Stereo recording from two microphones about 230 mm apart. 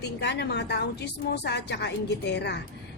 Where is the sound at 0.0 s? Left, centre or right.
Left.